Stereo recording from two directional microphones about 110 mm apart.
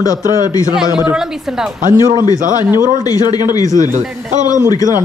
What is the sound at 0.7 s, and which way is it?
Speech, 5° right (ahead or behind).